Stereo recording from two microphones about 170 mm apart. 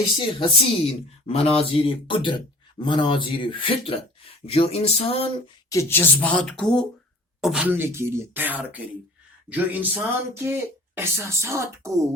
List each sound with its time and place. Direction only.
0.3 s speech: 35° left (ahead or behind)
5.6 s speech: 15° left (ahead or behind)
7.4 s speech: 5° right (ahead or behind)